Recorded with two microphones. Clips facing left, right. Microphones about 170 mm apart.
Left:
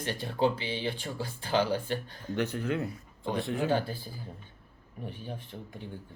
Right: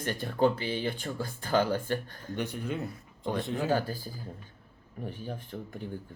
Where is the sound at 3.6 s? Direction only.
40° right (ahead or behind).